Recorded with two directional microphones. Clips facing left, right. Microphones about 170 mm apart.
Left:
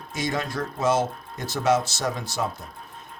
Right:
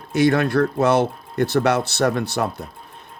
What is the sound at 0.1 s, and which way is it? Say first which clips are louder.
Speech: right 11 dB; 65° right (ahead or behind).